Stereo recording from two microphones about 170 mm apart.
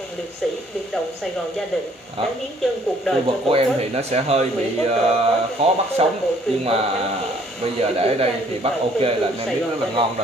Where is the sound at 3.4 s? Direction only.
35° right (ahead or behind).